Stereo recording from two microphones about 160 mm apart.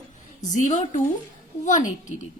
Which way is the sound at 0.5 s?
45° left (ahead or behind).